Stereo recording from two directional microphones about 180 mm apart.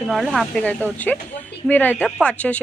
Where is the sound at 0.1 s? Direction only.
Centre (ahead or behind).